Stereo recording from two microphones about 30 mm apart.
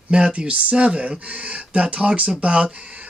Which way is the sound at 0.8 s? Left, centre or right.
Right.